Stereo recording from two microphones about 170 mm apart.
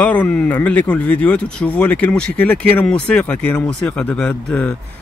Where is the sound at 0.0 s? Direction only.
10° left (ahead or behind).